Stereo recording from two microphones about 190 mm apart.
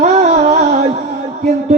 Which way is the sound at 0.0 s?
35° right (ahead or behind).